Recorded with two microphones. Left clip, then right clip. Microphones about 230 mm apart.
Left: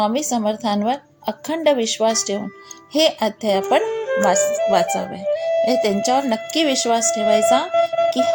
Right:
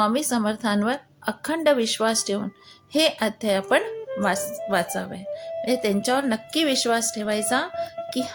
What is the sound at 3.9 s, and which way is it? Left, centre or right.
Music, left.